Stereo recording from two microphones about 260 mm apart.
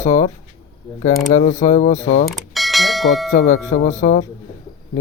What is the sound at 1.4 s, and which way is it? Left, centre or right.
Speech, left.